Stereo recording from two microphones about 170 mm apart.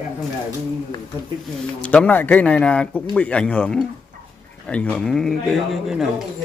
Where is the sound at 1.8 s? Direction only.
10° left (ahead or behind).